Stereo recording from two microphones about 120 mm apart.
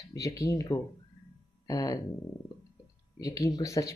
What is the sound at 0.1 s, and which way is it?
Speech, 25° left (ahead or behind).